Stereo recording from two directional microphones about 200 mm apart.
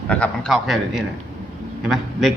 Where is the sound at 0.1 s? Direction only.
5° left (ahead or behind).